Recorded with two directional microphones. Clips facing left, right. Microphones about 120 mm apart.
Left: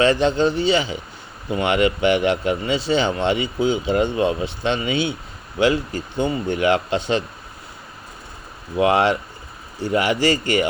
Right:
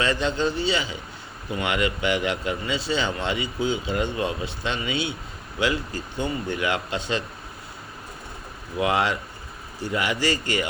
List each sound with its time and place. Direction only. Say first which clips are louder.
0.0 s speech: left 7 dB; 30° left (ahead or behind)
8.8 s speech: left 6 dB; 30° left (ahead or behind)
10.3 s speech: left 6 dB; 30° right (ahead or behind)